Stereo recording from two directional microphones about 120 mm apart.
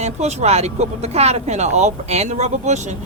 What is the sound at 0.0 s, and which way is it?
Speech, 65° right (ahead or behind).